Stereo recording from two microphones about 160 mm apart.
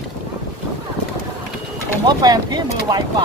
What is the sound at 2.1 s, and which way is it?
Speech, 25° right (ahead or behind).